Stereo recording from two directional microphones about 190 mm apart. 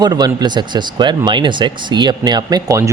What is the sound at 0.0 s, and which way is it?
Speech, 20° right (ahead or behind).